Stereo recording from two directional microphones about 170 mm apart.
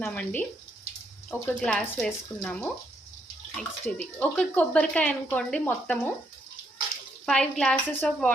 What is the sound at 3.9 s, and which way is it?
A woman's voice, 5° left (ahead or behind).